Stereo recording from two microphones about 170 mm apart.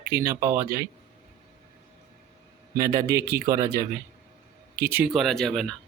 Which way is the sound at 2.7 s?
20° right (ahead or behind).